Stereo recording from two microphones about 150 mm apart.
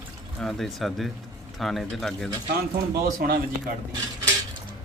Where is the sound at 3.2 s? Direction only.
75° right (ahead or behind).